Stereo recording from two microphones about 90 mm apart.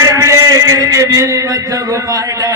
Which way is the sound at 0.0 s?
35° right (ahead or behind).